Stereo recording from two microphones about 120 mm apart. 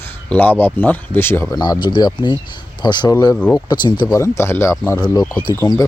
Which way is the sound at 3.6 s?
40° left (ahead or behind).